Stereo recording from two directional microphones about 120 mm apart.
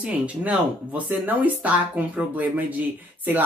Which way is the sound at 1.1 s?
15° right (ahead or behind).